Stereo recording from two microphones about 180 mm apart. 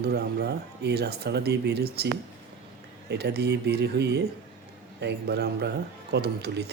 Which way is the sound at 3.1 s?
65° right (ahead or behind).